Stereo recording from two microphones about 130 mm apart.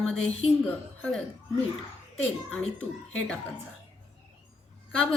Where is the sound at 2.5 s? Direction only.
10° left (ahead or behind).